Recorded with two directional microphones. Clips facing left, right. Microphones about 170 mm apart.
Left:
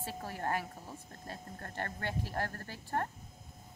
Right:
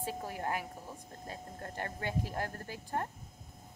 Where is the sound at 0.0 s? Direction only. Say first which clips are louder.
Right 1 dB; 15° right (ahead or behind).